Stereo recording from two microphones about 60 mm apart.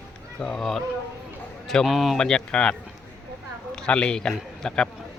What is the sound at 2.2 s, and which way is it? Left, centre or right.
A man's voice, centre.